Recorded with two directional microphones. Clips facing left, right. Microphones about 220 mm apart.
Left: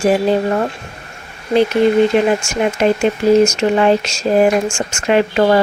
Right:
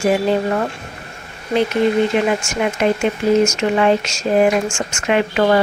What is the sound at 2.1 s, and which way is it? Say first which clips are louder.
Speech: left 3 dB; 35° left (ahead or behind).